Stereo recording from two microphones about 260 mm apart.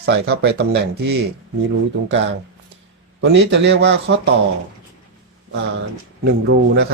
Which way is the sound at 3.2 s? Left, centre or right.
Right.